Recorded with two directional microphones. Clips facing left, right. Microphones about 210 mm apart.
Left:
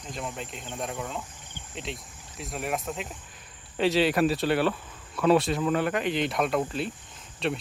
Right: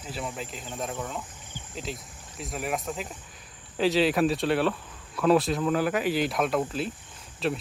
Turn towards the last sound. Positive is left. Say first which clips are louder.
# right 1 dB
turn(degrees=0)  # may be behind; listen again after turning